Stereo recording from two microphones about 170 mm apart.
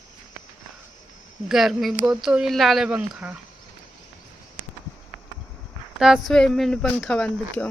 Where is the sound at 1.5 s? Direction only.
Centre (ahead or behind).